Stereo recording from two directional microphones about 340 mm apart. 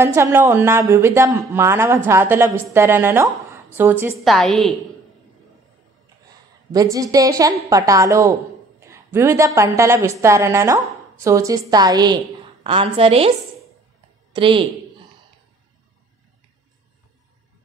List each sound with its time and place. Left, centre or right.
0.0 s a man's voice: centre
6.7 s a man's voice: centre
14.3 s a woman's voice: centre